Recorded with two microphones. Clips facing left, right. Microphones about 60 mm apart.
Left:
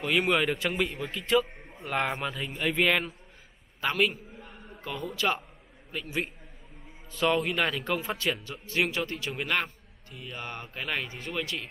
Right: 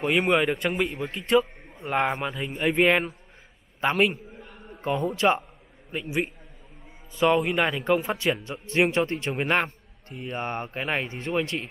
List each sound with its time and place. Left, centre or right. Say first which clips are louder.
0.1 s a man's voice: right 2 dB; centre
2.8 s a man's voice: right 5 dB; right
5.9 s a man's voice: right 5 dB; right
8.6 s a man's voice: right 6 dB; right